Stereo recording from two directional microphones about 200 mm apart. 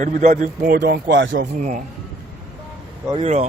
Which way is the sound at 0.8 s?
60° right (ahead or behind).